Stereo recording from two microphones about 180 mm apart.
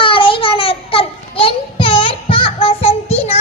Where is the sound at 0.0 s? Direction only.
30° left (ahead or behind).